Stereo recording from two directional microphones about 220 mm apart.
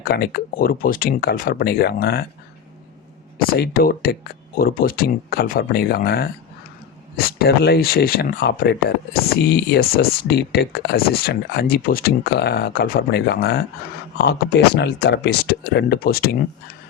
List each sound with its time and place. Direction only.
0.0 s speech: 45° left (ahead or behind)
3.3 s speech: 45° left (ahead or behind)